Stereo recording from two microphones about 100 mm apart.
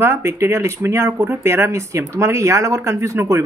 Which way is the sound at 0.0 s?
25° right (ahead or behind).